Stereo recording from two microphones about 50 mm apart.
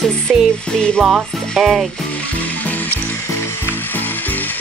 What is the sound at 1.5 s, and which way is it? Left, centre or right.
Music, centre.